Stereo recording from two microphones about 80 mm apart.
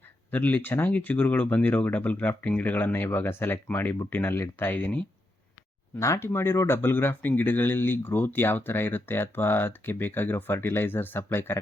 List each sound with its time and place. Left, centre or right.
0.3 s speech: left
6.0 s speech: left